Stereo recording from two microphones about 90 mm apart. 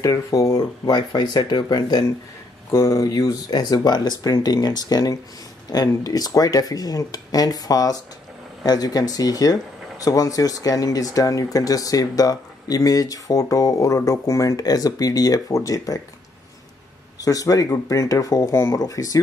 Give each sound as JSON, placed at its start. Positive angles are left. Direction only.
{"t": 0.0, "sound": "speech", "side_deg": 35}
{"t": 0.9, "sound": "speech", "side_deg": 50}
{"t": 2.7, "sound": "speech", "side_deg": 30}
{"t": 3.1, "sound": "speech", "side_deg": 45}
{"t": 17.2, "sound": "speech", "side_deg": 40}